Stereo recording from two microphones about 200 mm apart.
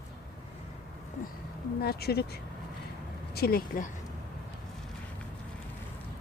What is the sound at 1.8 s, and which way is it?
Speech, 50° left (ahead or behind).